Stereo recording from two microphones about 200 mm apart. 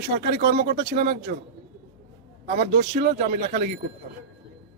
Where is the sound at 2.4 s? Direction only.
55° right (ahead or behind).